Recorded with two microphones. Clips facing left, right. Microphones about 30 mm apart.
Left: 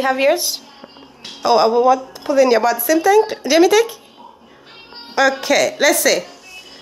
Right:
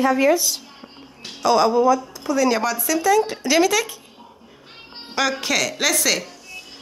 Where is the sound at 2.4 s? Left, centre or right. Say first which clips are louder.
Left 6 dB; centre.